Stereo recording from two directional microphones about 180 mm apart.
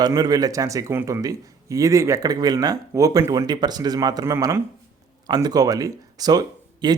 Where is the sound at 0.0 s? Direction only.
20° right (ahead or behind).